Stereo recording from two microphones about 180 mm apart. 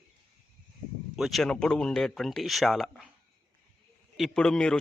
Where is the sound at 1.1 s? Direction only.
Centre (ahead or behind).